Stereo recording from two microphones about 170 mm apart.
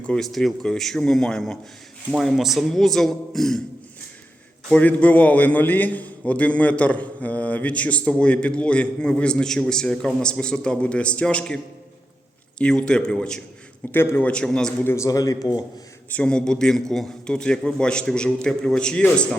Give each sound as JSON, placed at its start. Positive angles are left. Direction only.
{"t": 0.0, "sound": "a man's voice", "side_deg": 5}
{"t": 4.7, "sound": "a man's voice", "side_deg": 10}
{"t": 14.9, "sound": "speech", "side_deg": 20}
{"t": 16.1, "sound": "a man's voice", "side_deg": 5}